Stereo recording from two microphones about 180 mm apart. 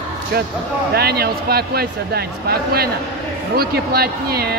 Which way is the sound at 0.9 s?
60° right (ahead or behind).